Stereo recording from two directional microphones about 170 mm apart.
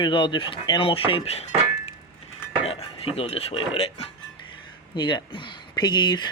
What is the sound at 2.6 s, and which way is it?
Speech, 35° left (ahead or behind).